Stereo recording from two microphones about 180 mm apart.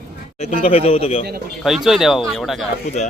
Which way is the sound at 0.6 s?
35° left (ahead or behind).